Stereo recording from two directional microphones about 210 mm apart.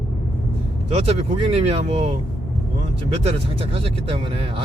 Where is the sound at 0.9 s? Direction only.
30° right (ahead or behind).